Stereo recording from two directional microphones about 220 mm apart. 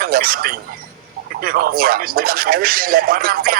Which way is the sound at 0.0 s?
40° right (ahead or behind).